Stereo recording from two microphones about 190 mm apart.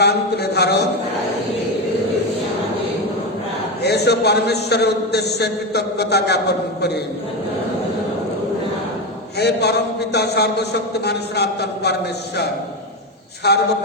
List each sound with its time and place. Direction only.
0.0 s a man's voice: 60° left (ahead or behind)
3.8 s a man's voice: 60° left (ahead or behind)
9.4 s a man's voice: 60° left (ahead or behind)
13.5 s a man's voice: 60° left (ahead or behind)